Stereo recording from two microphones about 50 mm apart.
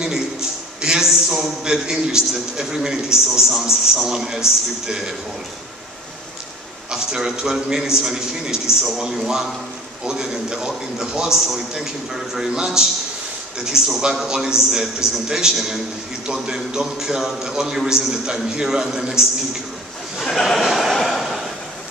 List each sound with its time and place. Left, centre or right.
0.7 s a man's voice: centre
6.9 s a man's voice: centre
20.2 s a sound: centre